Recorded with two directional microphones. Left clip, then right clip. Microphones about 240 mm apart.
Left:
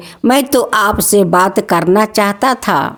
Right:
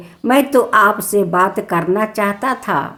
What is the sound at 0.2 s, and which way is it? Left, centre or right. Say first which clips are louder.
A woman's voice: left 1 dB; left.